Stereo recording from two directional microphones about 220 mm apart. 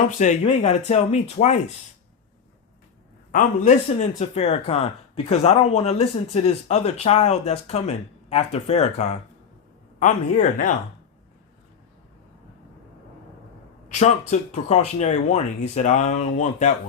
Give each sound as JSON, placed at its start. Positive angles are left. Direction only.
{"t": 0.2, "sound": "speech", "side_deg": 30}
{"t": 3.3, "sound": "speech", "side_deg": 30}
{"t": 13.8, "sound": "speech", "side_deg": 30}